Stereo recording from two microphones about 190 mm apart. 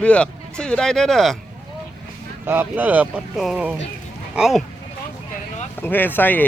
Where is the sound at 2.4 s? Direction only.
10° right (ahead or behind).